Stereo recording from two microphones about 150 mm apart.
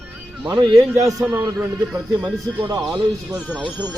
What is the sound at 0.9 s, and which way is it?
Speech, 20° right (ahead or behind).